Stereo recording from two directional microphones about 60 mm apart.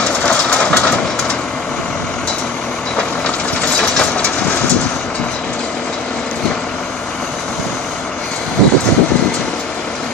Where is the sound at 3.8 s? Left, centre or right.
Centre.